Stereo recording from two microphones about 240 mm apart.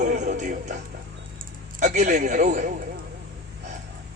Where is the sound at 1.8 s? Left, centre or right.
Right.